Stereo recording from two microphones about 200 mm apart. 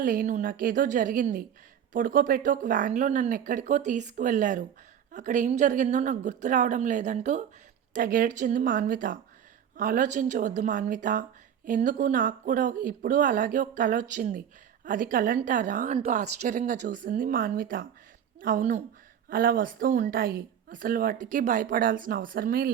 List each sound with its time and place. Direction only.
0.0 s a woman's voice: 45° right (ahead or behind)